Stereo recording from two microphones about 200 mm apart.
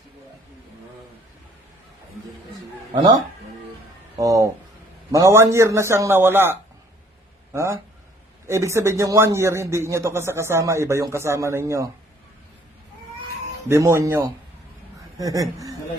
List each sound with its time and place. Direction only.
4.2 s a man's voice: 15° right (ahead or behind)
13.7 s a man's voice: 15° right (ahead or behind)